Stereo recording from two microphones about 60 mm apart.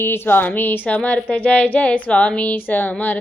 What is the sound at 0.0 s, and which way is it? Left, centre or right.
Speech, left.